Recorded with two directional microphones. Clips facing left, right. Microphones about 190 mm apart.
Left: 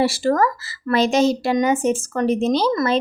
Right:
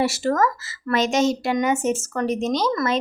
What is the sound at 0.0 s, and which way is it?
A woman's voice, 30° left (ahead or behind).